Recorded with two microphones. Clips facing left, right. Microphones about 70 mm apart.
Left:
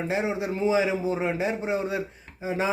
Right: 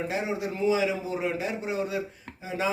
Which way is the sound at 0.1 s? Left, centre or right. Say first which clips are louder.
Left 3 dB; left.